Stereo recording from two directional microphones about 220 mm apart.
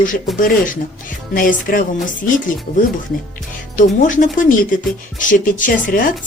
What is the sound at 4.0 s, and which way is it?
Speech, 35° left (ahead or behind).